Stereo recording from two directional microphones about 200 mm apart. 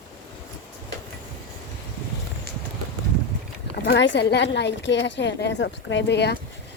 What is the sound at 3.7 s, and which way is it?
A woman's voice, 55° left (ahead or behind).